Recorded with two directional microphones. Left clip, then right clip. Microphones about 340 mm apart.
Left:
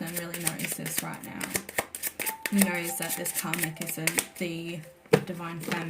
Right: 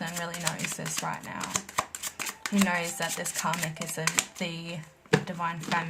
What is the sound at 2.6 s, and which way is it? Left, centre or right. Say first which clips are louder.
A woman's voice: right 2 dB; right.